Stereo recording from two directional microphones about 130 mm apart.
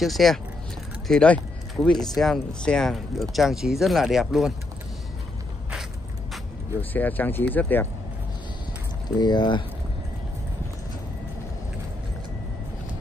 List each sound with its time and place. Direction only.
0.0 s speech: centre (ahead or behind)
6.8 s speech: 15° left (ahead or behind)
9.1 s speech: 35° left (ahead or behind)